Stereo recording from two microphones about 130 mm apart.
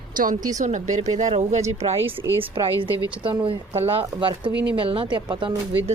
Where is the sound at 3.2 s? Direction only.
45° right (ahead or behind).